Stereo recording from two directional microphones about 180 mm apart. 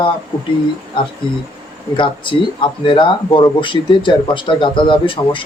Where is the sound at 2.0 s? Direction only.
25° left (ahead or behind).